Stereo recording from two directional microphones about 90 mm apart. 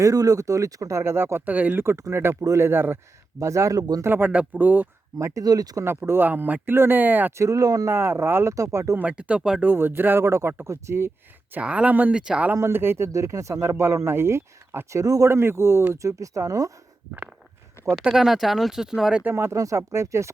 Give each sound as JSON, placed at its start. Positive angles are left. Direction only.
{"t": 0.0, "sound": "speech", "side_deg": -40}
{"t": 4.0, "sound": "speech", "side_deg": -20}
{"t": 5.1, "sound": "speech", "side_deg": -40}
{"t": 5.8, "sound": "speech", "side_deg": -25}
{"t": 7.3, "sound": "speech", "side_deg": -40}
{"t": 7.9, "sound": "speech", "side_deg": -25}
{"t": 9.0, "sound": "speech", "side_deg": -15}
{"t": 9.6, "sound": "speech", "side_deg": -25}
{"t": 11.5, "sound": "speech", "side_deg": -15}
{"t": 12.5, "sound": "speech", "side_deg": -30}
{"t": 18.0, "sound": "speech", "side_deg": -5}
{"t": 19.2, "sound": "speech", "side_deg": -25}